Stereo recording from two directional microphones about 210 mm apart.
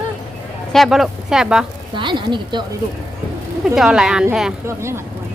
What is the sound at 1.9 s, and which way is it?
Speech, 20° right (ahead or behind).